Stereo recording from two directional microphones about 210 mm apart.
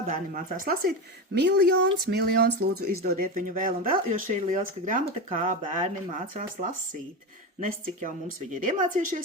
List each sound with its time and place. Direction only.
0.1 s speech: 40° right (ahead or behind)